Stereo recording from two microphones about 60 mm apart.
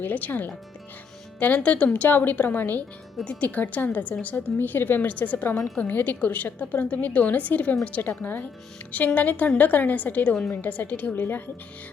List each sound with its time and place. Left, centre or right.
0.0 s a woman's voice: left